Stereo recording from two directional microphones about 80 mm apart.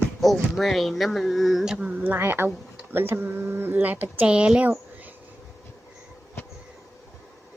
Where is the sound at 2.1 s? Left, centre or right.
Right.